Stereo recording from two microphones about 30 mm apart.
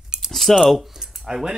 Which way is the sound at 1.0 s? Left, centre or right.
Right.